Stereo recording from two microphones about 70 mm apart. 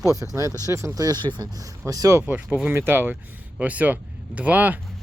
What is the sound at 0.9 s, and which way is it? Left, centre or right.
Speech, right.